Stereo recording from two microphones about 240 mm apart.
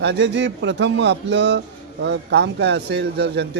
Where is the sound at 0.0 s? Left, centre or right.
Right.